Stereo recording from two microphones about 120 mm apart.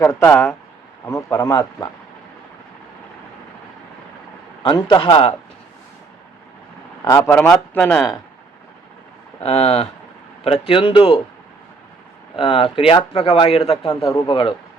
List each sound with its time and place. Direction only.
0.0 s speech: 20° left (ahead or behind)
4.6 s a man's voice: 40° left (ahead or behind)
7.2 s speech: 15° left (ahead or behind)
9.4 s speech: 60° left (ahead or behind)
12.4 s speech: 45° left (ahead or behind)
13.8 s speech: 30° left (ahead or behind)
14.3 s speech: 45° left (ahead or behind)